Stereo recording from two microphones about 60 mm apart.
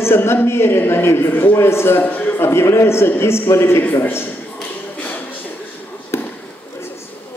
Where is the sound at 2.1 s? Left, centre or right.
Left.